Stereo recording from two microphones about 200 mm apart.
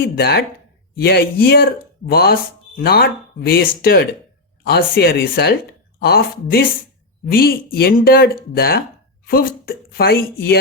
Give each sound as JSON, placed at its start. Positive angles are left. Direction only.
{"t": 0.0, "sound": "speech", "side_deg": 55}